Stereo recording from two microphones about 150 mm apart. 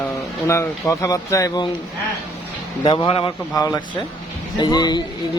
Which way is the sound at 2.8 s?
30° left (ahead or behind).